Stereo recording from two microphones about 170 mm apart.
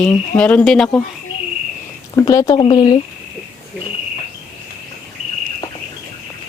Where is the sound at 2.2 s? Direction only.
20° left (ahead or behind).